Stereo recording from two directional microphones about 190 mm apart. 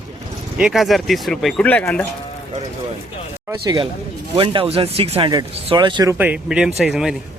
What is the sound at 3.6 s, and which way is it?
Speech, 20° right (ahead or behind).